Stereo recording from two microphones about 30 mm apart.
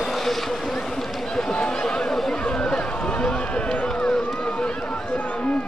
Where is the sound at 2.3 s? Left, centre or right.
Left.